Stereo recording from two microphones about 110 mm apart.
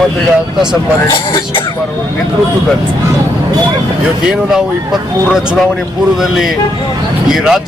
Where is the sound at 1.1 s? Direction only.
45° left (ahead or behind).